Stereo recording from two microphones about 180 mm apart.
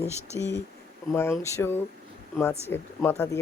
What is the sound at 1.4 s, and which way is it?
Speech, 10° left (ahead or behind).